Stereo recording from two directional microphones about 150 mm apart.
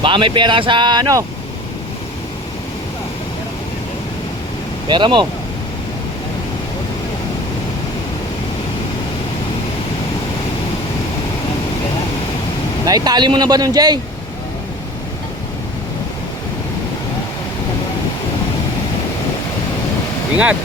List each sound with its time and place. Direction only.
0.0 s speech: 35° right (ahead or behind)
4.9 s speech: 30° right (ahead or behind)
12.8 s speech: 25° right (ahead or behind)